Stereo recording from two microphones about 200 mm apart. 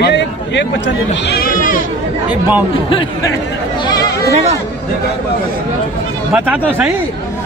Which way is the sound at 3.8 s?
20° left (ahead or behind).